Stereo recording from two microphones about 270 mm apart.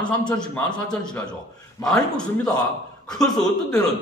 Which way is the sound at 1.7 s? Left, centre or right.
Centre.